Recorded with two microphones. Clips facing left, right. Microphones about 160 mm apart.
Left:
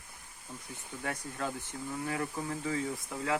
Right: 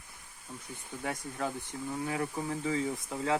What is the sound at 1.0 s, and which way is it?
Speech, 15° right (ahead or behind).